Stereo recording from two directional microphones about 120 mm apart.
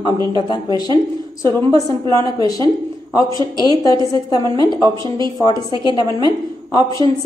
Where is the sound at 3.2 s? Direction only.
40° right (ahead or behind).